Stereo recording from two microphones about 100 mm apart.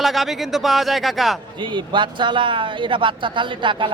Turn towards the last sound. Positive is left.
turn(degrees=-55)  # may be behind; listen again after turning